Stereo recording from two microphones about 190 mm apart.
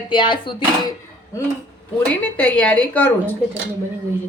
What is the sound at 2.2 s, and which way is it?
Speech, 10° left (ahead or behind).